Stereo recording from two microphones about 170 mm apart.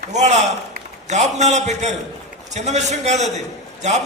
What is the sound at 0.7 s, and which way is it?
A man's voice, 45° right (ahead or behind).